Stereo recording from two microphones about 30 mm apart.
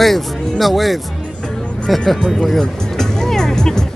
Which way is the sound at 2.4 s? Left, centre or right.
Centre.